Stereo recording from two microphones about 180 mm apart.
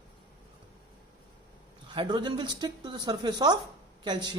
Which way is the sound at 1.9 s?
25° right (ahead or behind).